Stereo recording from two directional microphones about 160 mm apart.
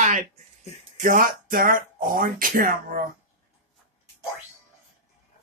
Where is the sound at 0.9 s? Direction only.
60° right (ahead or behind).